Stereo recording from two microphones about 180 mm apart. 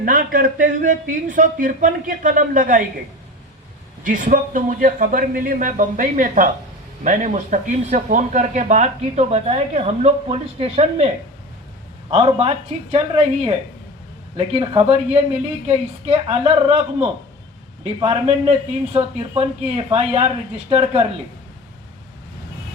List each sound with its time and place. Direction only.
0.0 s speech: 50° right (ahead or behind)
4.0 s speech: 50° right (ahead or behind)
12.1 s speech: 35° right (ahead or behind)